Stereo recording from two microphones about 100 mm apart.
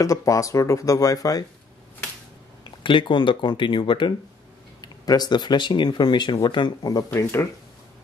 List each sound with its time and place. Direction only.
0.0 s speech: 35° left (ahead or behind)
2.8 s speech: 55° left (ahead or behind)
4.8 s speech: 40° left (ahead or behind)
7.2 s speech: 25° left (ahead or behind)